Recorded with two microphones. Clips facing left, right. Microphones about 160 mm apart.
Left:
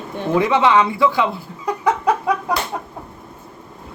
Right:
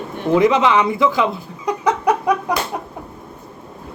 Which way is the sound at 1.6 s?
20° right (ahead or behind).